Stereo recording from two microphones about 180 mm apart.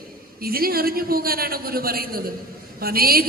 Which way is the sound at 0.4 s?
55° right (ahead or behind).